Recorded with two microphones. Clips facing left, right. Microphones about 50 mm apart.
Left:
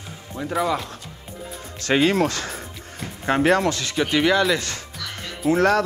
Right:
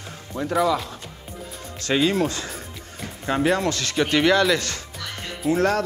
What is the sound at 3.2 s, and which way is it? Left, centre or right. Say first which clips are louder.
Speech: left 3 dB; left.